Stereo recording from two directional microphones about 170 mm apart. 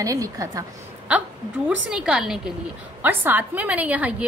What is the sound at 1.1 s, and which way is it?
A woman's voice, 10° right (ahead or behind).